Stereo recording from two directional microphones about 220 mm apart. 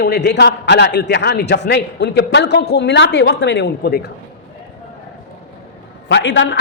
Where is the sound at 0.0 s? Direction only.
50° left (ahead or behind).